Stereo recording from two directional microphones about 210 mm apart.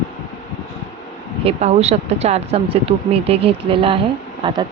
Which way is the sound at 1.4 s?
30° right (ahead or behind).